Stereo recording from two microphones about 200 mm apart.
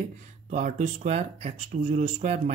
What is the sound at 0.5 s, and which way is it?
Speech, 40° right (ahead or behind).